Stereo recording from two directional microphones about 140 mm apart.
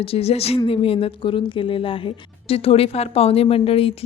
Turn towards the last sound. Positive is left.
turn(degrees=45)  # may be behind; listen again after turning